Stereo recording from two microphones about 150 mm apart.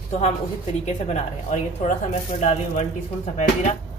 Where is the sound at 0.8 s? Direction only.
50° left (ahead or behind).